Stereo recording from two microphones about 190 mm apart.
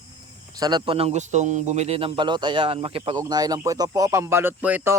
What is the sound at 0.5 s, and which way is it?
Speech, 20° right (ahead or behind).